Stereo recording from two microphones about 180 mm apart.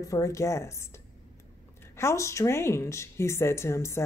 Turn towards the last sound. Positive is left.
turn(degrees=15)  # may be behind; listen again after turning